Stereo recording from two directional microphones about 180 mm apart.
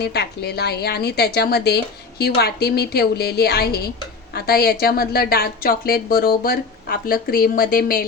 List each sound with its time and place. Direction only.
0.0 s a woman's voice: 65° left (ahead or behind)